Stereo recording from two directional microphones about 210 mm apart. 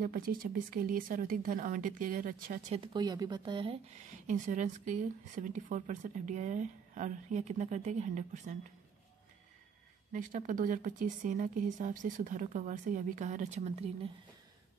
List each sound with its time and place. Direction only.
0.0 s speech: 45° right (ahead or behind)
2.8 s speech: 20° right (ahead or behind)
10.1 s speech: 40° right (ahead or behind)